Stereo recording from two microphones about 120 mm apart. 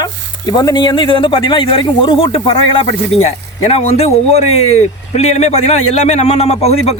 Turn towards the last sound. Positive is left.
turn(degrees=60)  # may be behind; listen again after turning